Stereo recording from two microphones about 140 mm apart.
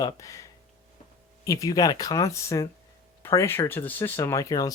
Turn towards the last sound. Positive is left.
turn(degrees=25)  # may be behind; listen again after turning